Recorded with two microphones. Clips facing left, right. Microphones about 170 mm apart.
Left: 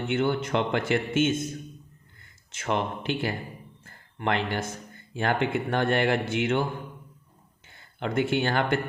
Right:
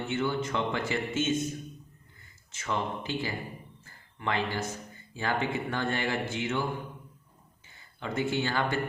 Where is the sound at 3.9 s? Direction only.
60° left (ahead or behind).